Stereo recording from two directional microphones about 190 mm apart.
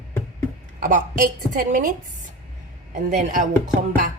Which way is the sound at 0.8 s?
45° right (ahead or behind).